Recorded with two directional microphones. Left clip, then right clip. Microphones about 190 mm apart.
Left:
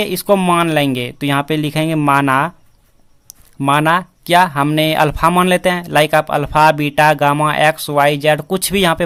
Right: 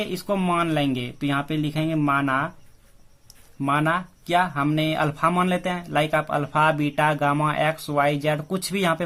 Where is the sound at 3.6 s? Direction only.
45° left (ahead or behind).